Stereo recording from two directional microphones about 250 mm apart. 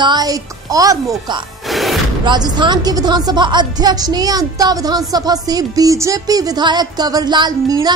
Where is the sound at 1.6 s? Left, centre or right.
Centre.